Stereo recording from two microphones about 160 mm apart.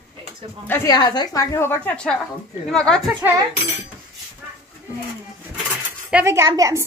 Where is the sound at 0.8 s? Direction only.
25° left (ahead or behind); by 3.0 s 5° left (ahead or behind).